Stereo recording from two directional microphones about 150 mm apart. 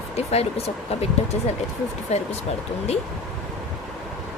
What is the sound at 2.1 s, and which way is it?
Speech, 45° left (ahead or behind).